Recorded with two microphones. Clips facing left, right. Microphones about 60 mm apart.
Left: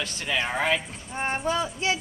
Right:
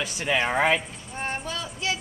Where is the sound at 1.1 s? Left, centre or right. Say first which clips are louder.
Left 5 dB; left.